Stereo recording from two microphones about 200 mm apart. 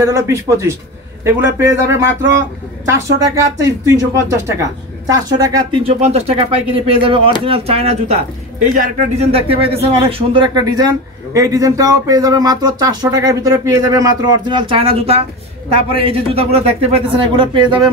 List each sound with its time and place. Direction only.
0.0 s speech: 15° right (ahead or behind)
5.9 s speech: 30° right (ahead or behind)